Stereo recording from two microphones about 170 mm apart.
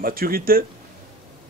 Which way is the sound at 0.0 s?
60° right (ahead or behind).